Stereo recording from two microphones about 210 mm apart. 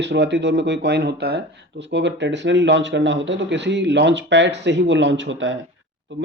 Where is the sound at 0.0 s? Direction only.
55° right (ahead or behind).